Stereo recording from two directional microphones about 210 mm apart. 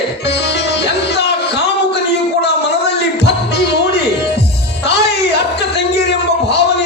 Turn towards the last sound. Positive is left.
turn(degrees=55)  # may be behind; listen again after turning